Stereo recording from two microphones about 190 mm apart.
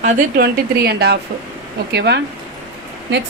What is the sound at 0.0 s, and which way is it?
A woman's voice, 55° right (ahead or behind).